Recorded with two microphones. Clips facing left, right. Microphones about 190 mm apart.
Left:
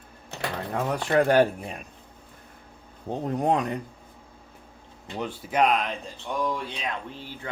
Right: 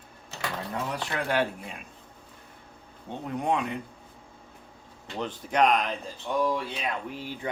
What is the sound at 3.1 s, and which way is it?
Speech, 40° left (ahead or behind).